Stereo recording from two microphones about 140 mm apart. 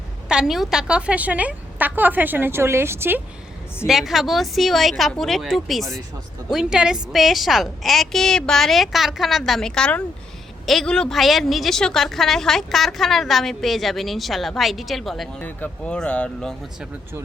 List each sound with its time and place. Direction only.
0.3 s a woman's voice: 5° right (ahead or behind)
3.8 s a woman's voice: centre (ahead or behind)
15.4 s speech: 10° left (ahead or behind)